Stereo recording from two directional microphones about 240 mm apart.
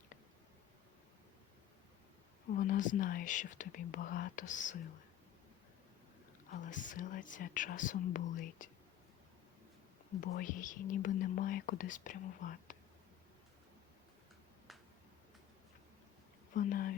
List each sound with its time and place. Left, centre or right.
2.5 s speech: left
6.5 s speech: left
10.2 s speech: left
16.6 s speech: left